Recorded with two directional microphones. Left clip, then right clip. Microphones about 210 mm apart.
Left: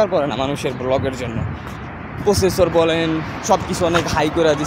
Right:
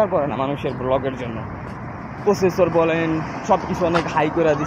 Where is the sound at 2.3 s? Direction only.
20° left (ahead or behind).